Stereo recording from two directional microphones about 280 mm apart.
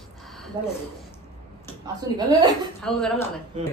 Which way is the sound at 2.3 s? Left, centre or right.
Centre.